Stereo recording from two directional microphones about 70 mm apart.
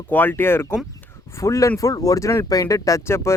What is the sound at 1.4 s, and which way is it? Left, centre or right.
Speech, left.